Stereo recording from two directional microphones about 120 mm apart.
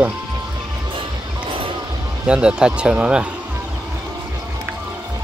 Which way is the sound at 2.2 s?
10° right (ahead or behind).